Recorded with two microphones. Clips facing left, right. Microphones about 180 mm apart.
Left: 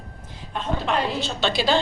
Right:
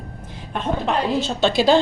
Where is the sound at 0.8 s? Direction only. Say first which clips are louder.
Right 3 dB; 45° right (ahead or behind).